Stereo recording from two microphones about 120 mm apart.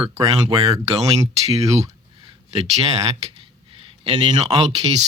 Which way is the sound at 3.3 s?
50° right (ahead or behind).